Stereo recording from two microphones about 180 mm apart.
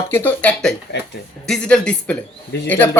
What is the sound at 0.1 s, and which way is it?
Speech, 10° left (ahead or behind).